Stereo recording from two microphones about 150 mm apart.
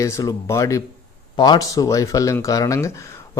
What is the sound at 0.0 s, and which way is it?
Speech, 20° left (ahead or behind).